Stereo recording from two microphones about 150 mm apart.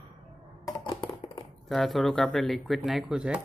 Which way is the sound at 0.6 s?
35° left (ahead or behind).